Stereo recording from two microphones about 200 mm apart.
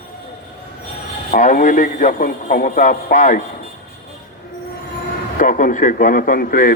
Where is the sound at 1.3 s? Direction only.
40° left (ahead or behind).